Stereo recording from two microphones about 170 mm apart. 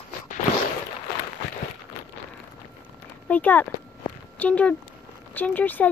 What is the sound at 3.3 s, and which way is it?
Speech, 10° left (ahead or behind).